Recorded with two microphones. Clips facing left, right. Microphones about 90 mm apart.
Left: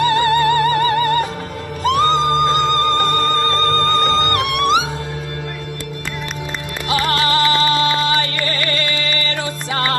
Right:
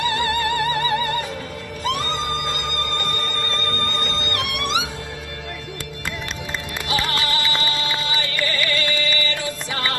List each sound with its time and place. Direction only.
0.0 s music: 50° left (ahead or behind)
1.8 s music: 60° left (ahead or behind)
6.8 s music: 45° left (ahead or behind)